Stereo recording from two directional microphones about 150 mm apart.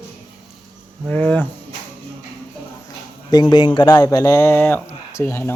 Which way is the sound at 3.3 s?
30° left (ahead or behind).